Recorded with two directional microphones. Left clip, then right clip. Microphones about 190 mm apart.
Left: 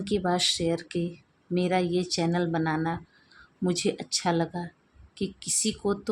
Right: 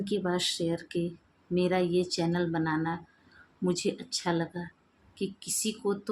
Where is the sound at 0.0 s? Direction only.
30° left (ahead or behind).